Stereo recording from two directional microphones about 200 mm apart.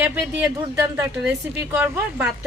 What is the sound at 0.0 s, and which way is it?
A woman's voice, 10° right (ahead or behind).